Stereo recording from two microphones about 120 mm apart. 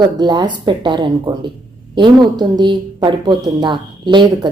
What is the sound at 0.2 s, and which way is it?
A woman's voice, 40° right (ahead or behind).